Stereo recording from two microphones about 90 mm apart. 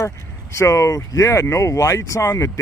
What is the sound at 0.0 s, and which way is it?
Speech, 35° left (ahead or behind).